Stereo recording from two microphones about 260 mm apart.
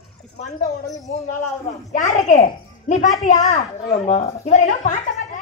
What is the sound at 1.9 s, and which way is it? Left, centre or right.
A child's voice, left.